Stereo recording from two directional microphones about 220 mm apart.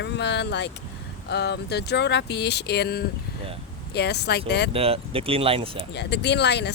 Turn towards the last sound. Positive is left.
turn(degrees=50)  # may be behind; listen again after turning